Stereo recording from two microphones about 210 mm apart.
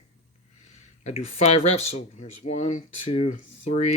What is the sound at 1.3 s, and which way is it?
Speech, 30° left (ahead or behind).